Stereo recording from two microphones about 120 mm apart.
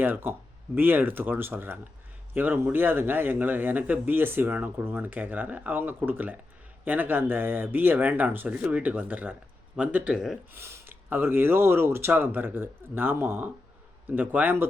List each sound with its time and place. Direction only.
0.0 s speech: 15° right (ahead or behind)
10.5 s speech: 20° right (ahead or behind)